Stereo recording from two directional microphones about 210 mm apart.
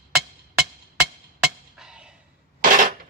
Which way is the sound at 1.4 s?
5° right (ahead or behind).